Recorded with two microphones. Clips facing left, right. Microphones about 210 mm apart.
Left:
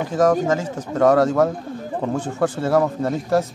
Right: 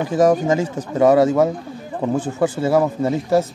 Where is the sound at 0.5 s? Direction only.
15° right (ahead or behind).